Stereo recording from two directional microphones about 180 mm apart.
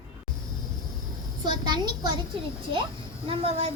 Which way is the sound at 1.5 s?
25° right (ahead or behind).